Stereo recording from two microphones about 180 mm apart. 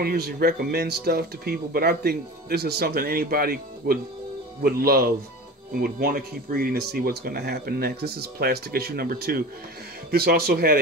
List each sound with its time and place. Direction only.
0.0 s speech: 60° right (ahead or behind)